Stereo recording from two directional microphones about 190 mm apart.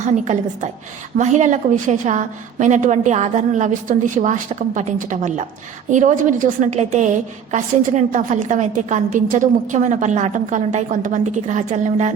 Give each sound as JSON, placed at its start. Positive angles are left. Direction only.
{"t": 0.0, "sound": "a woman's voice", "side_deg": -40}